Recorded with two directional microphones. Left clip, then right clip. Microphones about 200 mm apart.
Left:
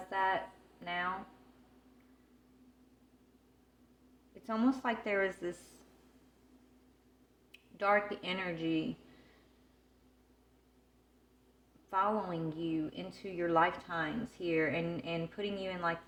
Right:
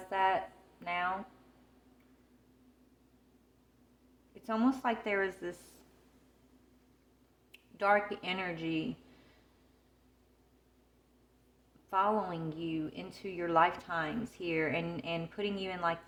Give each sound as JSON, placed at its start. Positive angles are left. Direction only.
{"t": 0.1, "sound": "a sound", "side_deg": -25}
{"t": 4.4, "sound": "a woman's voice", "side_deg": -20}
{"t": 7.8, "sound": "a woman's voice", "side_deg": -15}
{"t": 11.9, "sound": "a woman's voice", "side_deg": -20}